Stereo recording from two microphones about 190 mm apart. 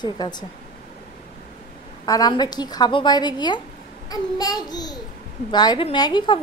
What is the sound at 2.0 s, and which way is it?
A child's voice, 20° left (ahead or behind).